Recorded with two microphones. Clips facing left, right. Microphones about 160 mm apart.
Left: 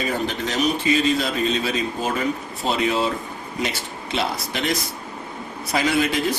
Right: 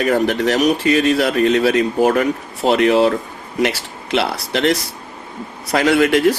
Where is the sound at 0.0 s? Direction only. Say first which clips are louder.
Right 9 dB; 70° right (ahead or behind).